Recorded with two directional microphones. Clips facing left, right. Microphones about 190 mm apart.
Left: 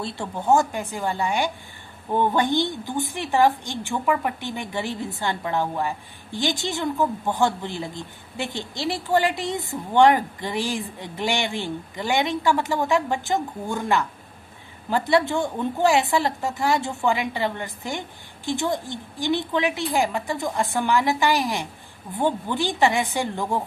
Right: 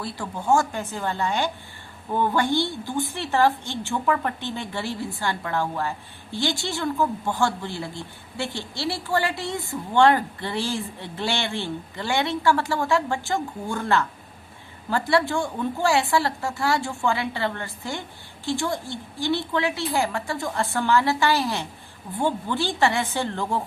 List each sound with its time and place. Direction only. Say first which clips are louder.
0.0 s a woman's voice: left 2 dB; 25° left (ahead or behind)